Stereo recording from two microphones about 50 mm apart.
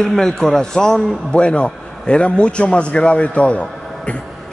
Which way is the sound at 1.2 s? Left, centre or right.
Left.